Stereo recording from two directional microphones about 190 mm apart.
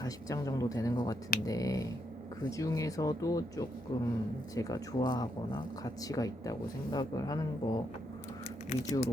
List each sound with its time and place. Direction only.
0.0 s speech: 20° left (ahead or behind)
8.7 s speech: 35° left (ahead or behind)